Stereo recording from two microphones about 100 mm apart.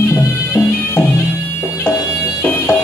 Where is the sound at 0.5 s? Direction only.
25° left (ahead or behind).